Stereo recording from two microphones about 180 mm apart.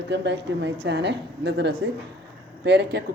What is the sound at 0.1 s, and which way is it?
Speech, 75° right (ahead or behind).